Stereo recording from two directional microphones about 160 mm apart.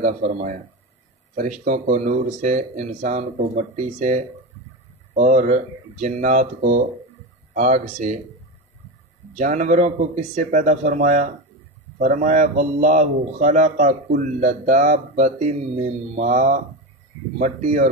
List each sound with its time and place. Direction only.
0.0 s speech: 50° right (ahead or behind)
9.3 s speech: 50° right (ahead or behind)